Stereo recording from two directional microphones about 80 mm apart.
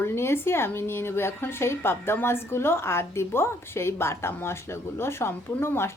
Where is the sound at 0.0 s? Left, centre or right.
Left.